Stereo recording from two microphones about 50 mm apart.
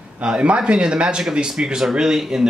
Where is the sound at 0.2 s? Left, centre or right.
Right.